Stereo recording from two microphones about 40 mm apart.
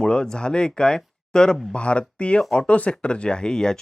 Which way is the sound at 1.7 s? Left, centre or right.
Left.